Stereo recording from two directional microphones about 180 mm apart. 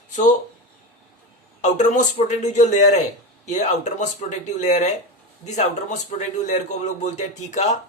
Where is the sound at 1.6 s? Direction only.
40° left (ahead or behind).